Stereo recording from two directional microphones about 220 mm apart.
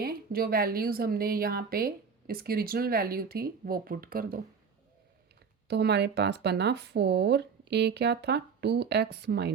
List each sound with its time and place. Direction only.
0.0 s a woman's voice: 45° right (ahead or behind)
5.6 s a woman's voice: 50° right (ahead or behind)